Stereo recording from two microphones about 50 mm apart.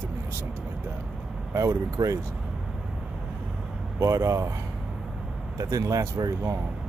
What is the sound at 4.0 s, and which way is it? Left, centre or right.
Speech, right.